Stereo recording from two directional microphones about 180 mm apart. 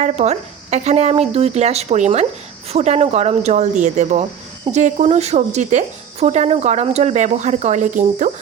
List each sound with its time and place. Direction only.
0.0 s speech: 40° right (ahead or behind)